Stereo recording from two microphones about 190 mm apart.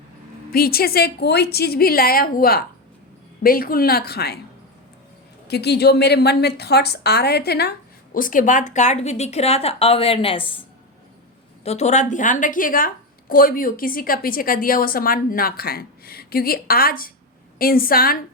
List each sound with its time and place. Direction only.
0.5 s a woman's voice: 50° left (ahead or behind)
5.5 s a woman's voice: 60° left (ahead or behind)
8.1 s a woman's voice: 45° left (ahead or behind); by 10.6 s 30° left (ahead or behind)
11.6 s a woman's voice: 35° left (ahead or behind); by 18.2 s 50° left (ahead or behind)